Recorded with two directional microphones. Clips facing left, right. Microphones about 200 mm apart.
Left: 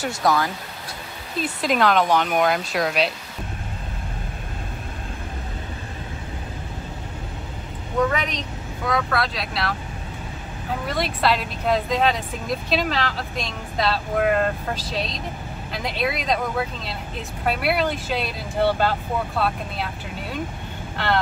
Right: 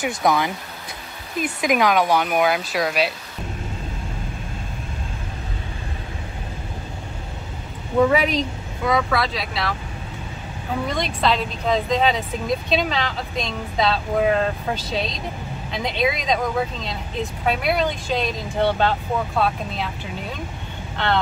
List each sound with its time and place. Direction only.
0.0 s speech: 20° right (ahead or behind); by 3.1 s centre (ahead or behind)
8.1 s speech: 5° right (ahead or behind)
10.9 s speech: 5° left (ahead or behind)